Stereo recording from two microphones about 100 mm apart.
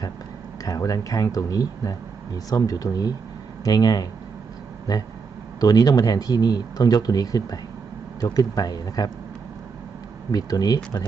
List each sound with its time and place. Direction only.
0.6 s speech: 35° left (ahead or behind)
5.5 s speech: 40° left (ahead or behind)
10.3 s speech: 40° left (ahead or behind)